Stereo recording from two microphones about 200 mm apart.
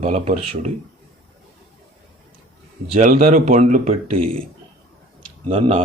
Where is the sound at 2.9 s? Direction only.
40° right (ahead or behind).